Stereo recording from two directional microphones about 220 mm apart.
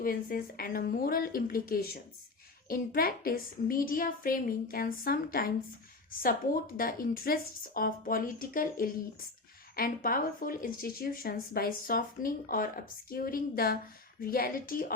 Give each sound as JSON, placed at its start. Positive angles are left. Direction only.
{"t": 0.0, "sound": "speech", "side_deg": 40}